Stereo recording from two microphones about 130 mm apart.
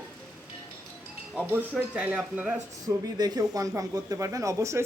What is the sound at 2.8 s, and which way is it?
Speech, 30° right (ahead or behind).